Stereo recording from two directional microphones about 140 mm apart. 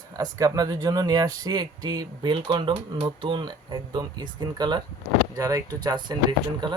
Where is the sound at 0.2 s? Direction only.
25° right (ahead or behind).